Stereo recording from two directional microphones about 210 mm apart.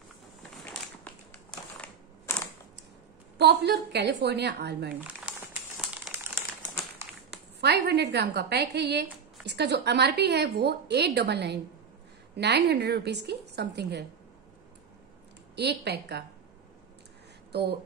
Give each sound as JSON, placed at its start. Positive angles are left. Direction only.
{"t": 1.8, "sound": "crushing", "side_deg": 5}
{"t": 3.3, "sound": "a woman's voice", "side_deg": -55}
{"t": 5.3, "sound": "crumpling", "side_deg": -5}
{"t": 7.6, "sound": "a woman's voice", "side_deg": -50}
{"t": 15.5, "sound": "a woman's voice", "side_deg": -50}
{"t": 17.5, "sound": "speech", "side_deg": -50}